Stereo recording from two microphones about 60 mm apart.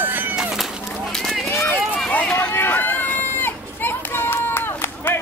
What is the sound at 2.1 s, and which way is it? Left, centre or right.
Run, centre.